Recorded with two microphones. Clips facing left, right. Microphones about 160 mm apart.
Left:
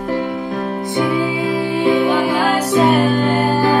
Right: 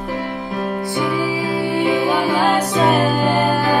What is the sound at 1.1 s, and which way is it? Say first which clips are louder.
Music: left 2 dB; 25° left (ahead or behind).